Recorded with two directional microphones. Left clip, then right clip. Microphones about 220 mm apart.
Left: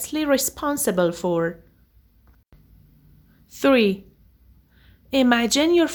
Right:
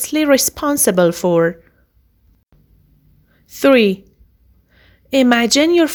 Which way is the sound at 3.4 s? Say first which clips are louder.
Right 6 dB; 20° right (ahead or behind).